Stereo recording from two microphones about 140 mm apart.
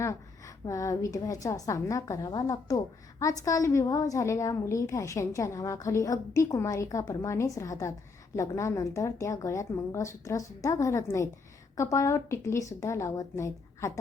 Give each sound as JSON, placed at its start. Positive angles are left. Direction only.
{"t": 0.0, "sound": "a woman's voice", "side_deg": 25}